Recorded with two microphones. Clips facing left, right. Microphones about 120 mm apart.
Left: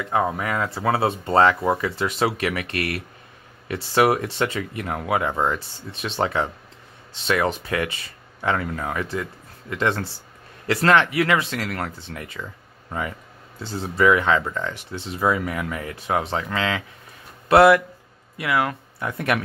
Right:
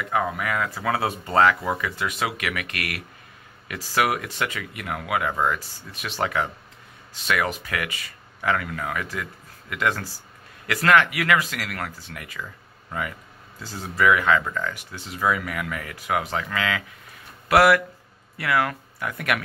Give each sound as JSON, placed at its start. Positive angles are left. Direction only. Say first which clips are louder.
{"t": 0.0, "sound": "speech", "louder": "left 2 dB", "side_deg": 30}
{"t": 13.6, "sound": "speech", "louder": "left 3 dB", "side_deg": 30}